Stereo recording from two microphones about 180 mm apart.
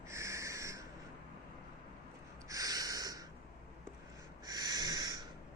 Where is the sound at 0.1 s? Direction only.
15° right (ahead or behind).